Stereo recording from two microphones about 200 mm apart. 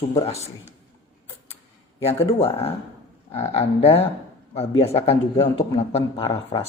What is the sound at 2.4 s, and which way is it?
A man's voice, 30° left (ahead or behind).